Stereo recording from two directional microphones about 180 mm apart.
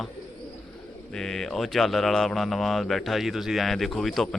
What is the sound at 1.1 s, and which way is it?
Speech, centre (ahead or behind).